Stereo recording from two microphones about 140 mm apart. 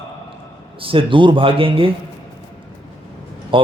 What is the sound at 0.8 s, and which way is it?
A man's voice, 40° right (ahead or behind).